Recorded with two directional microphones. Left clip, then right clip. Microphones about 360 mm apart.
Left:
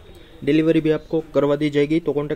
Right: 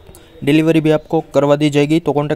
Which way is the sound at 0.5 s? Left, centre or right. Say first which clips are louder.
Right 5 dB; right.